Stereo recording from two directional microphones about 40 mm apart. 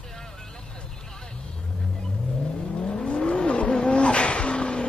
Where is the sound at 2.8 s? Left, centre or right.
Left.